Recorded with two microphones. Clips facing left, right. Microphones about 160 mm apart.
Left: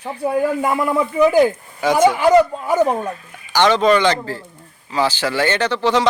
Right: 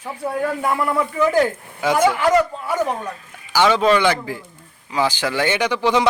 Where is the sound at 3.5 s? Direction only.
5° right (ahead or behind).